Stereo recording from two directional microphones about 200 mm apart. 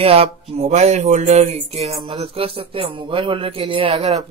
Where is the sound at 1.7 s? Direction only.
30° right (ahead or behind).